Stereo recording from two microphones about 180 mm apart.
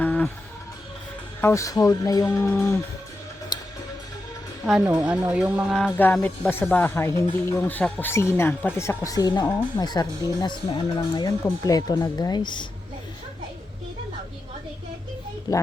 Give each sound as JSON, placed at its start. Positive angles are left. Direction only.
{"t": 0.0, "sound": "music", "side_deg": 10}
{"t": 1.4, "sound": "speech", "side_deg": 15}
{"t": 3.5, "sound": "music", "side_deg": 20}
{"t": 4.6, "sound": "speech", "side_deg": 0}
{"t": 15.5, "sound": "speech", "side_deg": 20}